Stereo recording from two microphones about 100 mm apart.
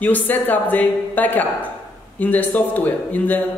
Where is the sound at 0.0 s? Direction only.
15° left (ahead or behind).